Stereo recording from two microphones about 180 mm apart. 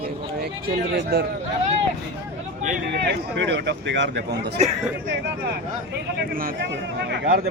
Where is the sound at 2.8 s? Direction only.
65° right (ahead or behind).